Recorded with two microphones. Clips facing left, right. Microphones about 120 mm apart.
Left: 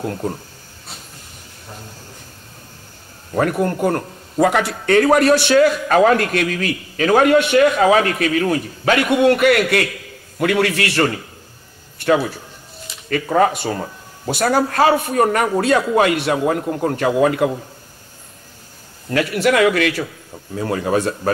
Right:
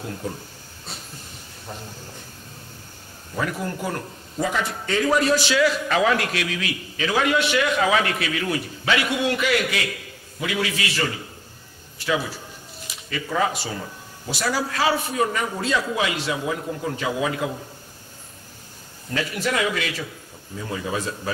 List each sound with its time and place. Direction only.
0.0 s a man's voice: 50° left (ahead or behind)
3.3 s a man's voice: 55° left (ahead or behind)
19.1 s speech: 65° left (ahead or behind)